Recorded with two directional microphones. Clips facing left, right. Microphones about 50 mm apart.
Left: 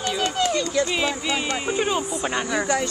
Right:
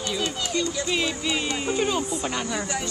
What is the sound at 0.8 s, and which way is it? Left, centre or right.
A child's voice, centre.